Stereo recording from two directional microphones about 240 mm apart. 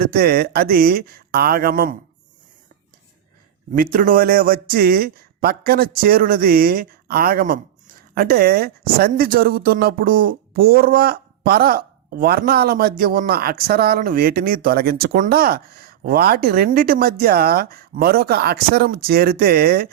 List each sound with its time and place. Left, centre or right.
0.0 s speech: right
3.9 s speech: right